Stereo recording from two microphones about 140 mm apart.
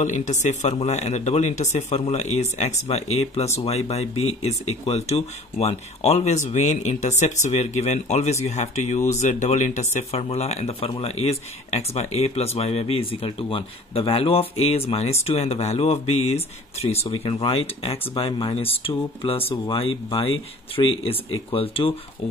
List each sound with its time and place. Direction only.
0.0 s a man's voice: 60° left (ahead or behind); by 21.9 s 40° left (ahead or behind)